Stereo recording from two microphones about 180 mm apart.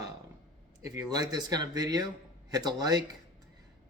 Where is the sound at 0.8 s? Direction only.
20° right (ahead or behind).